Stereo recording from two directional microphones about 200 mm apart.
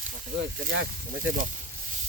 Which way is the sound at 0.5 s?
50° right (ahead or behind).